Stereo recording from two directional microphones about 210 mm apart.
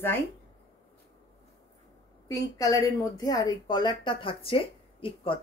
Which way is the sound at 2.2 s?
15° left (ahead or behind).